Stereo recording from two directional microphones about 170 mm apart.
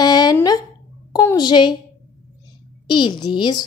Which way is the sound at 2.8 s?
25° left (ahead or behind).